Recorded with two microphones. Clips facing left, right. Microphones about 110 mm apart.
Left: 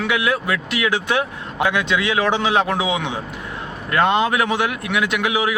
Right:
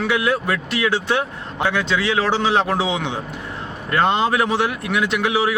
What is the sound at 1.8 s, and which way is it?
Speech, 30° right (ahead or behind).